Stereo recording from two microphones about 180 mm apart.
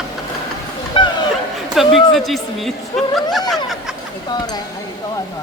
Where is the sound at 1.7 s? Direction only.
Centre (ahead or behind).